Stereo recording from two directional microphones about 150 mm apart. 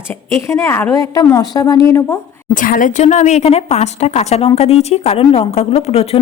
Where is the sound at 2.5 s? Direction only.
65° left (ahead or behind).